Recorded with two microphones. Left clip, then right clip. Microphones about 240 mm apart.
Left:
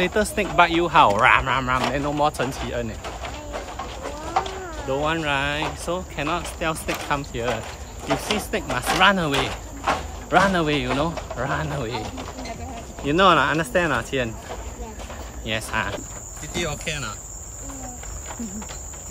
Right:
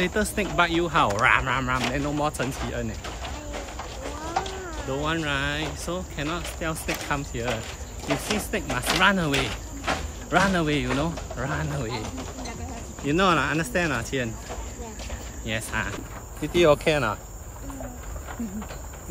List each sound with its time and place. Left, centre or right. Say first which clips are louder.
0.0 s speech: left 4 dB; centre
4.4 s speech: left 5 dB; centre
13.0 s speech: left 5 dB; centre
15.4 s speech: left 4 dB; centre
16.5 s speech: right 9 dB; centre